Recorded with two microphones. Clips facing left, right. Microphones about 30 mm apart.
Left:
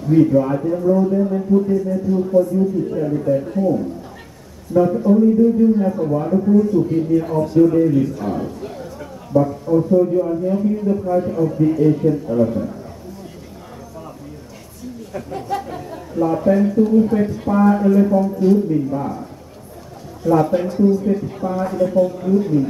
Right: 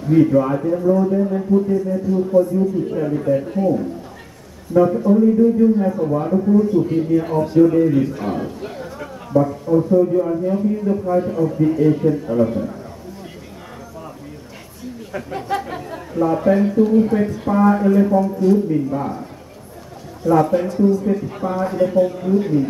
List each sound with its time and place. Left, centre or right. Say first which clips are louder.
0.0 s a man's voice: even; centre
2.3 s a man's voice: even; centre
4.7 s a man's voice: even; centre
6.6 s a man's voice: even; centre
15.1 s speech: right 1 dB; right
17.2 s a man's voice: even; centre
20.2 s a man's voice: even; centre
20.5 s speech: even; centre
21.0 s a man's voice: left 1 dB; centre
21.3 s a man's voice: even; right